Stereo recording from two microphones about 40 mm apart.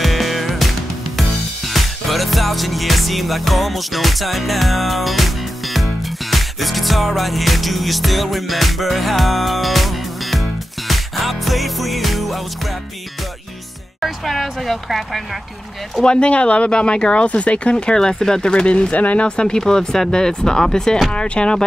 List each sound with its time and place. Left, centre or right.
0.0 s music: centre
14.0 s speech: centre
16.0 s speech: left
17.9 s speech: centre; by 19.2 s left
19.2 s speech: left
19.7 s speech: centre